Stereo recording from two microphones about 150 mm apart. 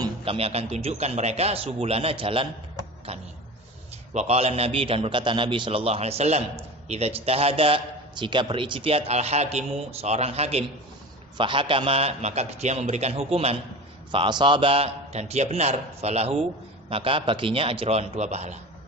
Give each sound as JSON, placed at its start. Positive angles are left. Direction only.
{"t": 0.3, "sound": "a man's voice", "side_deg": -40}
{"t": 11.3, "sound": "a man's voice", "side_deg": -35}